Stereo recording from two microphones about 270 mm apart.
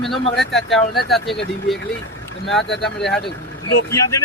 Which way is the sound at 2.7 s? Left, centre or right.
Left.